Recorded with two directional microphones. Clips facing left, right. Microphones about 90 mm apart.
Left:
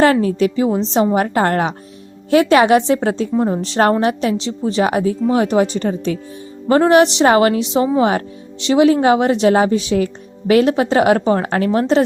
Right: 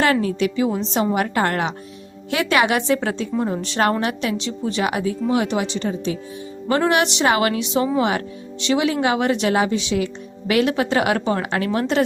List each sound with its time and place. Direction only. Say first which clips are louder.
0.0 s speech: left 5 dB; 35° left (ahead or behind)
6.7 s speech: left 7 dB; 30° left (ahead or behind)